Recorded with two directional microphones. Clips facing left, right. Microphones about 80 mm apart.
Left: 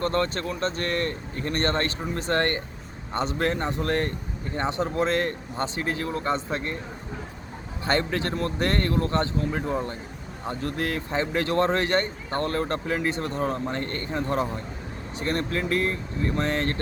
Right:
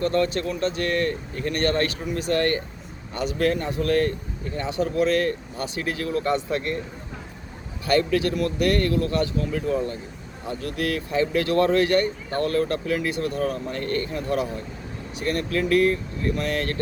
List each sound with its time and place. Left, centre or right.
0.0 s speech: left
7.9 s speech: left